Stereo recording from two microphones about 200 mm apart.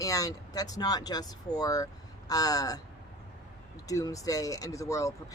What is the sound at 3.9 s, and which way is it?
Speech, 15° left (ahead or behind).